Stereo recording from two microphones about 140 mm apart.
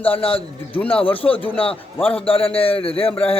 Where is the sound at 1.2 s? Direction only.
10° left (ahead or behind).